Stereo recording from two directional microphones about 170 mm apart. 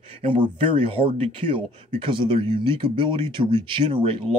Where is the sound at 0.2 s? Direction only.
30° right (ahead or behind).